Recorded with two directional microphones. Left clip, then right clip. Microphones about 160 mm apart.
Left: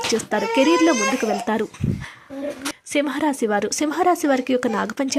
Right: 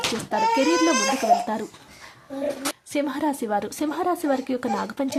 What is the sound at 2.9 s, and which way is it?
Speech, 25° left (ahead or behind).